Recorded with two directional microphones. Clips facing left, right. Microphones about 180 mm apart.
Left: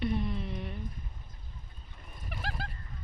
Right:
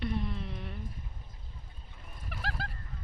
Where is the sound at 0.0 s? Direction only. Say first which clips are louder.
Left 3 dB; centre (ahead or behind).